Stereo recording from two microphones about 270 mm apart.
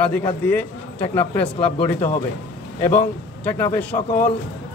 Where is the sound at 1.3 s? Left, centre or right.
Left.